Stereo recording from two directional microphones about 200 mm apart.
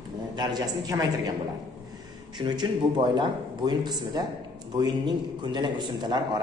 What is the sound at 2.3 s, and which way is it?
Speech, 20° right (ahead or behind).